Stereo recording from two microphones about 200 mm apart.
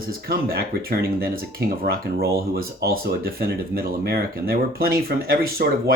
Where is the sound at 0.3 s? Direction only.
50° right (ahead or behind).